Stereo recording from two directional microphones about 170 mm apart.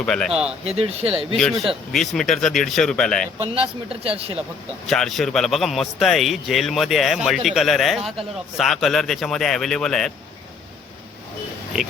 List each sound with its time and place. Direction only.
0.0 s a man's voice: 5° left (ahead or behind)
0.6 s speech: 35° right (ahead or behind)
1.6 s a man's voice: centre (ahead or behind)
3.5 s speech: 35° right (ahead or behind)
4.9 s a man's voice: centre (ahead or behind)